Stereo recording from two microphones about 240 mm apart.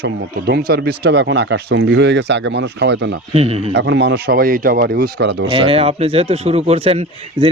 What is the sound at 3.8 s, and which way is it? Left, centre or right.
A man's voice, right.